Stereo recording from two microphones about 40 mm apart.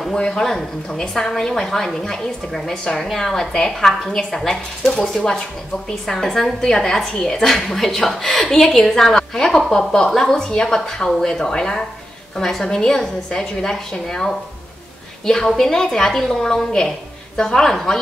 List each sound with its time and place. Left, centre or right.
0.1 s a woman's voice: centre
15.4 s a woman's voice: centre